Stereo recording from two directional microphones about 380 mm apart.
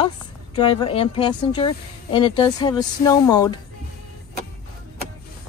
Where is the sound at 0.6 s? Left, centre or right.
Centre.